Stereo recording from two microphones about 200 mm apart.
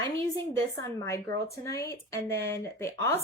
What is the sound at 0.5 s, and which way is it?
A woman's voice, 15° left (ahead or behind).